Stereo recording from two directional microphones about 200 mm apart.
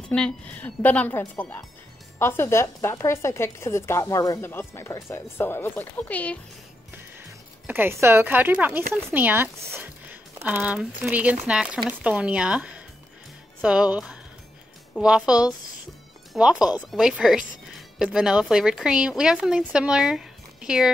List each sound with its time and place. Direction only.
0.1 s a woman's voice: 5° left (ahead or behind)
7.6 s speech: 10° right (ahead or behind)